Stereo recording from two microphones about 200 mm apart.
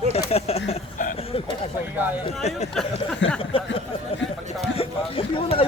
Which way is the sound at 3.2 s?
70° left (ahead or behind).